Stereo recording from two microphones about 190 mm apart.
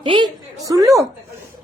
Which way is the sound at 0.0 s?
25° right (ahead or behind).